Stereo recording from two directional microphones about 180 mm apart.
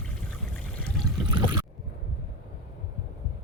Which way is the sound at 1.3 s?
25° right (ahead or behind).